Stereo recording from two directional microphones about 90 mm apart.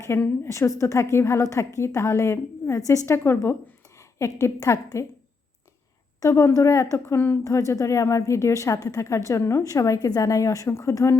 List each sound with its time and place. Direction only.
0.1 s a woman's voice: 30° left (ahead or behind)
6.2 s a woman's voice: 35° left (ahead or behind)